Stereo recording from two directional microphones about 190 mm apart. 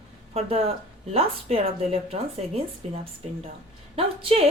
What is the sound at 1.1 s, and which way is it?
Speech, 30° right (ahead or behind).